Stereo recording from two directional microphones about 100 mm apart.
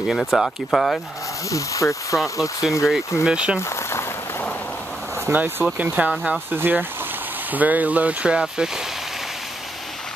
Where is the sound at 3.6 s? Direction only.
30° left (ahead or behind).